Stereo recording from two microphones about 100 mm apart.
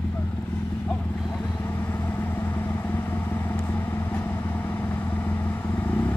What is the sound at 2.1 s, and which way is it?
Vehicle, 20° left (ahead or behind).